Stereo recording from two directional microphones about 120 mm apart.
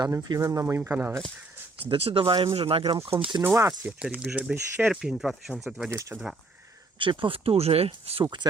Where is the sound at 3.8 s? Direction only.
10° right (ahead or behind).